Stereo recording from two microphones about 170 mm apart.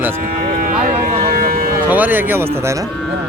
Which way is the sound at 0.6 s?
55° right (ahead or behind).